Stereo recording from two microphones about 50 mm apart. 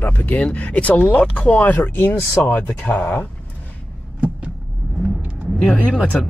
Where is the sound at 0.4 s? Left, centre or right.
Left.